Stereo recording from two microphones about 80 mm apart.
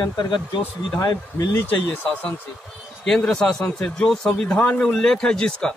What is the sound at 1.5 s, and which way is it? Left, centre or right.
Speech, left.